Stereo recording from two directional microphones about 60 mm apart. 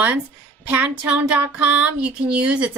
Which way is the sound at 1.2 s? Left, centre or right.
Right.